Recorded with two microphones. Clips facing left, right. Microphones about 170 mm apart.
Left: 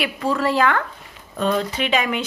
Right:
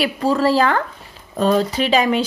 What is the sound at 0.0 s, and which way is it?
Speech, 35° right (ahead or behind).